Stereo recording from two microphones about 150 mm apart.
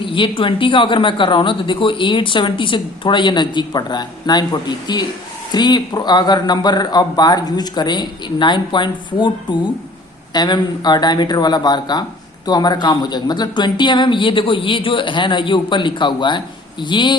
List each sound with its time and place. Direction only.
0.0 s speech: 35° left (ahead or behind)